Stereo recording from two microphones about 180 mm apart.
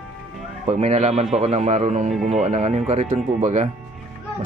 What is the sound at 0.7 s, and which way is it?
Speech, 40° right (ahead or behind).